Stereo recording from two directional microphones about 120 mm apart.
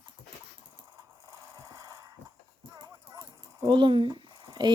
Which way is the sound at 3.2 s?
35° right (ahead or behind).